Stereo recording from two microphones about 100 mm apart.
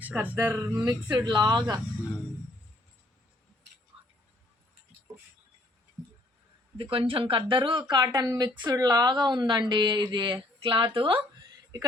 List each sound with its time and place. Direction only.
0.0 s speech: 15° right (ahead or behind)
1.1 s a woman's voice: 50° right (ahead or behind)
6.9 s speech: 65° right (ahead or behind); by 8.0 s 50° right (ahead or behind)
8.0 s a woman's voice: 35° right (ahead or behind); by 11.2 s 60° right (ahead or behind)